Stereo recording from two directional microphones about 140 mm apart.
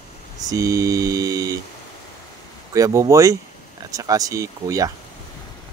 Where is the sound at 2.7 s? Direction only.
25° right (ahead or behind).